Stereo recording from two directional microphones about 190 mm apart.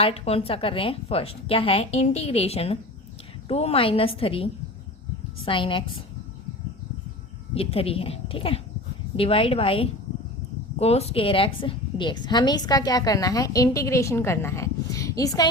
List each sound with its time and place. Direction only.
0.0 s a woman's voice: 30° left (ahead or behind)
7.5 s a woman's voice: 30° left (ahead or behind)